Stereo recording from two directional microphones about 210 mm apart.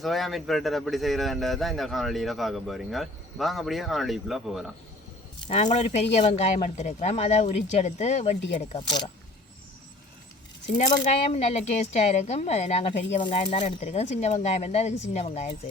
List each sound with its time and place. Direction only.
0.0 s a man's voice: centre (ahead or behind)
5.5 s speech: 35° left (ahead or behind)
10.9 s speech: 30° left (ahead or behind)